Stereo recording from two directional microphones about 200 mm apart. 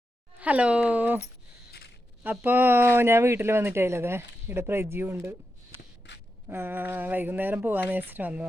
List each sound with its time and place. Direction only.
0.3 s speech: 5° right (ahead or behind)
2.2 s speech: 10° right (ahead or behind)
6.0 s a sound: 60° left (ahead or behind)
6.5 s speech: 10° right (ahead or behind)